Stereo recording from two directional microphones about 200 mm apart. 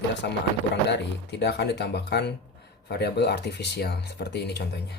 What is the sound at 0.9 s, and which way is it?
Speech, 60° left (ahead or behind).